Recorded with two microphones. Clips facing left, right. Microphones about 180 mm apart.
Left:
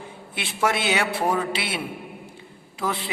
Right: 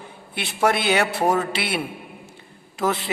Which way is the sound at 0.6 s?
55° right (ahead or behind).